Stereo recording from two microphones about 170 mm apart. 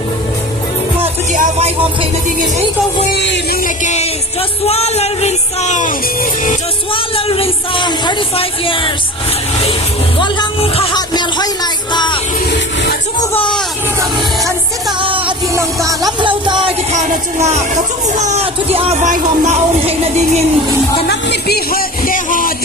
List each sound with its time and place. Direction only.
1.0 s music: 45° right (ahead or behind)
3.2 s music: 90° left
3.8 s music: 40° left (ahead or behind)
6.9 s speech: 35° left (ahead or behind)
10.2 s music: 30° left (ahead or behind)
12.5 s music: 75° left (ahead or behind)
15.5 s music: 20° right (ahead or behind)
16.2 s music: 30° right (ahead or behind)
16.9 s speech: 45° right (ahead or behind)
21.1 s music: 75° left (ahead or behind); by 22.5 s 55° left (ahead or behind)